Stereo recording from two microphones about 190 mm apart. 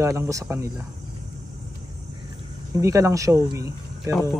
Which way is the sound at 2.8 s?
15° right (ahead or behind).